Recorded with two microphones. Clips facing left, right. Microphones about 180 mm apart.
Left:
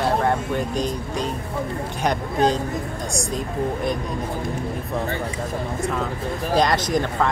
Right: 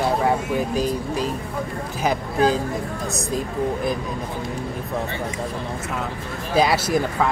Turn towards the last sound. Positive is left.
turn(degrees=-5)  # may be behind; listen again after turning